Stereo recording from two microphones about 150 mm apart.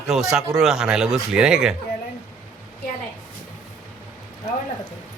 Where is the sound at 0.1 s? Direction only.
5° right (ahead or behind).